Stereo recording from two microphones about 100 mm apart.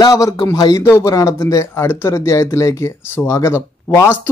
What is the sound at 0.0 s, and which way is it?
A man's voice, 40° left (ahead or behind).